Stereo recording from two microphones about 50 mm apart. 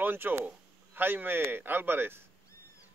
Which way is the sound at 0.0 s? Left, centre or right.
Right.